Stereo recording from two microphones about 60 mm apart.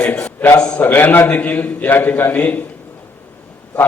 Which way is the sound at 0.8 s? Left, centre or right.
Left.